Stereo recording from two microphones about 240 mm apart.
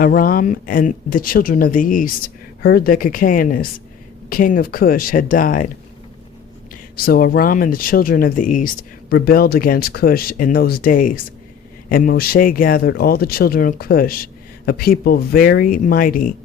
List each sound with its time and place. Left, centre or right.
0.0 s speech: left
6.9 s speech: left